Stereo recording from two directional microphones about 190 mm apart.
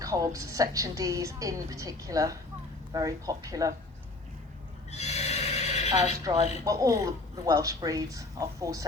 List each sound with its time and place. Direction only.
0.0 s a woman's voice: 15° right (ahead or behind)
4.9 s neigh: 35° left (ahead or behind)
6.3 s a woman's voice: 20° right (ahead or behind)